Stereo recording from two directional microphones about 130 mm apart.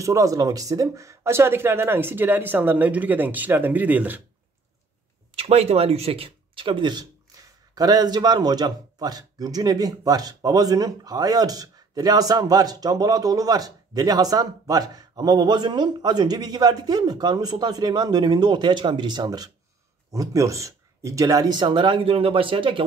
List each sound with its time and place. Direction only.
0.0 s speech: 25° right (ahead or behind)
5.3 s a man's voice: 50° right (ahead or behind)